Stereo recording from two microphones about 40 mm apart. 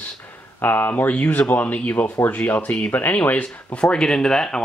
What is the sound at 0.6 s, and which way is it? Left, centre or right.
Speech, left.